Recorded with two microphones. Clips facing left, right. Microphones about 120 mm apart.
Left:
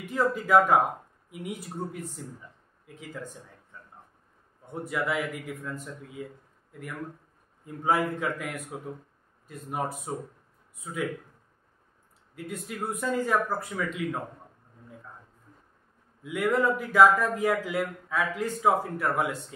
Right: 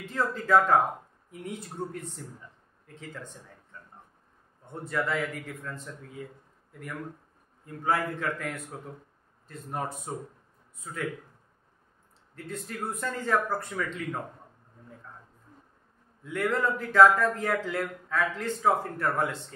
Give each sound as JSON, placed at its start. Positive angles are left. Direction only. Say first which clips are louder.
{"t": 0.0, "sound": "a man's voice", "louder": "left 3 dB", "side_deg": 15}
{"t": 3.7, "sound": "a sound", "louder": "even", "side_deg": 10}
{"t": 4.8, "sound": "a man's voice", "louder": "even", "side_deg": 10}
{"t": 7.6, "sound": "a man's voice", "louder": "left 2 dB", "side_deg": 15}
{"t": 12.4, "sound": "a man's voice", "louder": "left 1 dB", "side_deg": 10}
{"t": 16.2, "sound": "a man's voice", "louder": "left 2 dB", "side_deg": 10}